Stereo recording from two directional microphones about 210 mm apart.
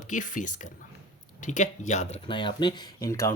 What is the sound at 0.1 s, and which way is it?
Speech, 35° left (ahead or behind).